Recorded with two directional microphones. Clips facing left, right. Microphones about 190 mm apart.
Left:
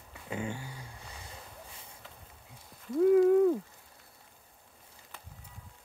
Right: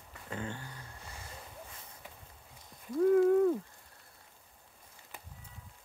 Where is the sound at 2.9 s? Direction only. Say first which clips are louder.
Left 3 dB; 5° left (ahead or behind).